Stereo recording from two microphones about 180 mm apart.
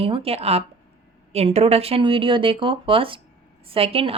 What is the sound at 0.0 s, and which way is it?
Speech, 30° right (ahead or behind).